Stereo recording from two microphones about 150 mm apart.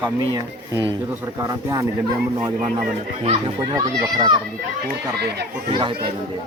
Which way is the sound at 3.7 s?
25° right (ahead or behind).